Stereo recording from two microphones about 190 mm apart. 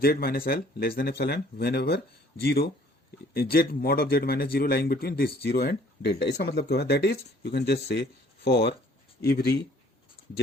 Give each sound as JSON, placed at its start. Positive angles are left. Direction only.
{"t": 0.0, "sound": "speech", "side_deg": 50}